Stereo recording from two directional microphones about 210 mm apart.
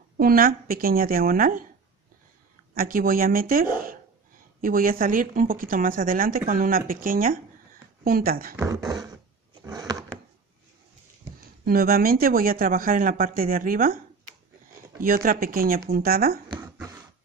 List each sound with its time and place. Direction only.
0.2 s speech: 45° right (ahead or behind)
2.7 s speech: 45° right (ahead or behind)
8.5 s beatboxing: 15° right (ahead or behind)
9.7 s a sound: 20° right (ahead or behind)
11.6 s speech: 45° right (ahead or behind)
15.0 s speech: 40° right (ahead or behind)
16.4 s a sound: 10° right (ahead or behind)